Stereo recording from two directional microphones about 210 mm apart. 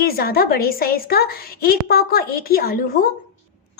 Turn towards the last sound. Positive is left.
turn(degrees=45)  # may be behind; listen again after turning